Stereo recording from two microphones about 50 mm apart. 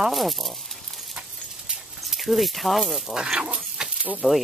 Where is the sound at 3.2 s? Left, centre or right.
Centre.